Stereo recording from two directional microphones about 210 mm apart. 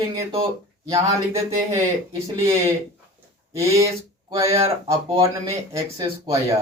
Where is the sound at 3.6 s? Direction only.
15° right (ahead or behind).